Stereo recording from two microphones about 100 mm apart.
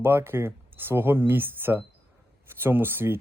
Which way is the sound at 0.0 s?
25° right (ahead or behind).